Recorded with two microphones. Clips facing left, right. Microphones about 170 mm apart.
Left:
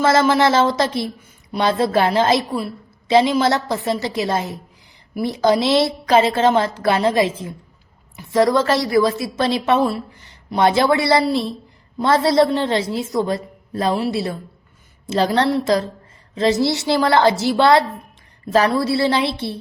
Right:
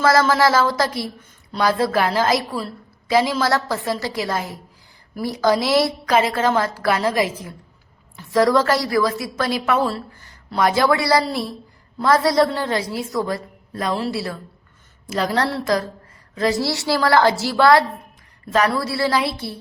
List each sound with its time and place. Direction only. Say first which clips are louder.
0.0 s a woman's voice: left 1 dB; 20° left (ahead or behind)